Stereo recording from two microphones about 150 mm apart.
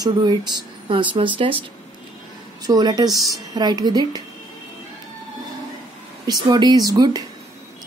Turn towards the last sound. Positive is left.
turn(degrees=-25)  # may be behind; listen again after turning